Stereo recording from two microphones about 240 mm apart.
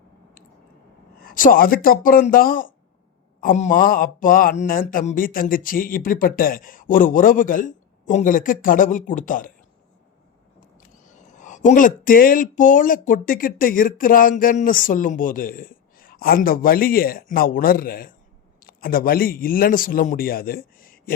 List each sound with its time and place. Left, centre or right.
1.2 s speech: left
10.8 s a man's voice: left